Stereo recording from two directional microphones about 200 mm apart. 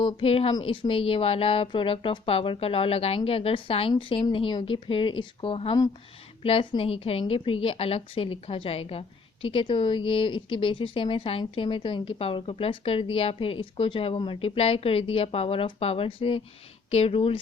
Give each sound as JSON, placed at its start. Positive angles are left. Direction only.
{"t": 0.0, "sound": "a woman's voice", "side_deg": 30}